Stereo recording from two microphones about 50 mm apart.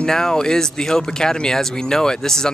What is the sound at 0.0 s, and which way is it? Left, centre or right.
Speech, centre.